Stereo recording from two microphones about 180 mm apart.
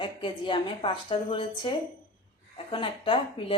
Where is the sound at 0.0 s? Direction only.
25° left (ahead or behind).